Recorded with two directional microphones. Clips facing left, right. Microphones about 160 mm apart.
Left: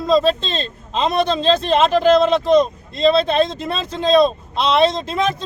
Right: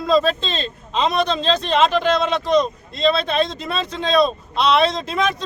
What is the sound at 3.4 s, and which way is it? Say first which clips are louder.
Speech: left 1 dB; centre (ahead or behind).